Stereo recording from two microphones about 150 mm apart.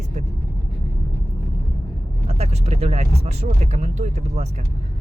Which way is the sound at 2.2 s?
45° right (ahead or behind).